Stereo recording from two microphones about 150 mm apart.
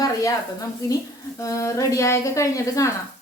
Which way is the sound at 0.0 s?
25° left (ahead or behind).